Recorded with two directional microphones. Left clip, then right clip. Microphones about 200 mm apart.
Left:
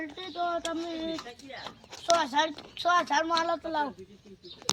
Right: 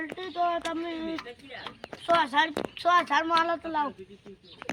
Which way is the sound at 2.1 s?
20° left (ahead or behind).